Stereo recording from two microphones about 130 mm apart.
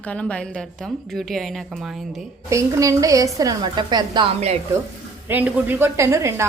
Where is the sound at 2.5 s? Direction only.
25° right (ahead or behind).